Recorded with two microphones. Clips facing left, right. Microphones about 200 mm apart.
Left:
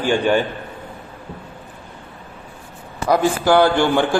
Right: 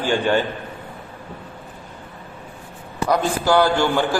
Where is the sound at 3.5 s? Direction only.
15° left (ahead or behind).